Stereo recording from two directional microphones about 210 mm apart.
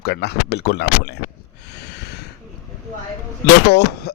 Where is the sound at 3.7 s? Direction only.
50° left (ahead or behind).